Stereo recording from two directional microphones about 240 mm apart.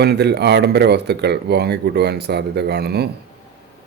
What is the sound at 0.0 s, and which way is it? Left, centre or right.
Speech, right.